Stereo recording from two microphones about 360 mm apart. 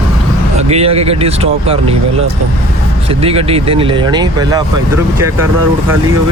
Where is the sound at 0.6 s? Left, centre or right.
Centre.